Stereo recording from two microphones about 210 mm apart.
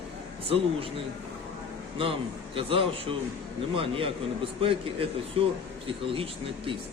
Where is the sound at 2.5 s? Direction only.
25° right (ahead or behind).